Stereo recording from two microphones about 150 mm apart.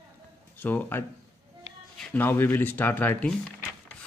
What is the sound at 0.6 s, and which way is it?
Speech, 10° left (ahead or behind).